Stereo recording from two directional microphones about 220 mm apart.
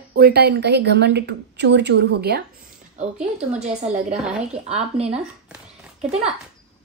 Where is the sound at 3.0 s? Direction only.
30° right (ahead or behind).